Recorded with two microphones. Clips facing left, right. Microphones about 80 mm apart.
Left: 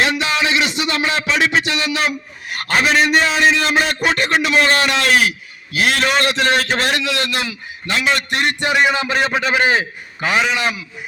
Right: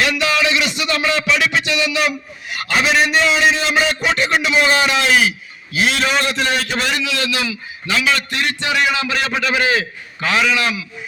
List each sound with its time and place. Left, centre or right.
0.0 s music: left
5.7 s a man's voice: left
8.7 s music: left